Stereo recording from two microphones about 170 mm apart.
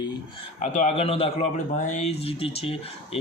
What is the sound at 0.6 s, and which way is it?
A man's voice, 45° left (ahead or behind).